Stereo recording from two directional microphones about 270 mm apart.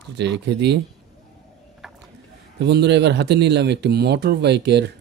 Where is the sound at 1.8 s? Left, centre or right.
Centre.